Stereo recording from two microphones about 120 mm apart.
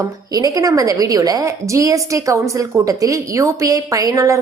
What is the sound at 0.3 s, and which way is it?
A woman's voice, 30° right (ahead or behind).